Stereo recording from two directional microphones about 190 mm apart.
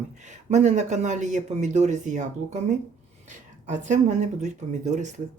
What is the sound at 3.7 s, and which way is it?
Speech, 40° right (ahead or behind).